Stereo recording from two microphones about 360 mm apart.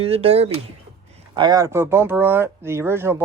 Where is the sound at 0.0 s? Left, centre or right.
Centre.